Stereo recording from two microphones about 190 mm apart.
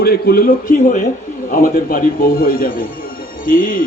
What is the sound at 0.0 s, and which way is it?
A woman's voice, 55° left (ahead or behind).